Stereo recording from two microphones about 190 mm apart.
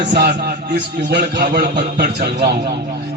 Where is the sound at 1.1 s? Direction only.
60° right (ahead or behind).